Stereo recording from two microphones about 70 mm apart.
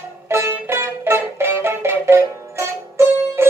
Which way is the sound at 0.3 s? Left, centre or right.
Right.